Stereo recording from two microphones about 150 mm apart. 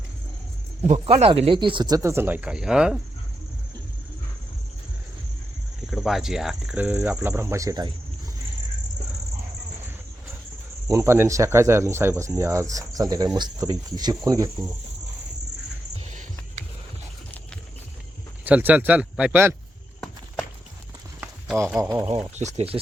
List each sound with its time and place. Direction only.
0.8 s speech: 40° right (ahead or behind); by 3.0 s 5° right (ahead or behind)
5.9 s speech: centre (ahead or behind); by 7.9 s 20° right (ahead or behind)
10.8 s speech: 20° right (ahead or behind)
18.4 s speech: 10° right (ahead or behind)
21.2 s a sound: centre (ahead or behind)
22.4 s speech: 50° right (ahead or behind)